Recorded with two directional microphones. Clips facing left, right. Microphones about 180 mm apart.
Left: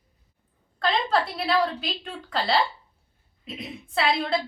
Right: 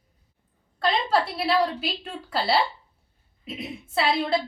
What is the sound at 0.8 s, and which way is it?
A woman's voice, 5° right (ahead or behind).